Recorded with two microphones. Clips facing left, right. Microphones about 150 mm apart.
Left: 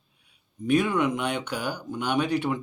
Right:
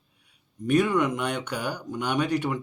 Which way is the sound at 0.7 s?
5° left (ahead or behind).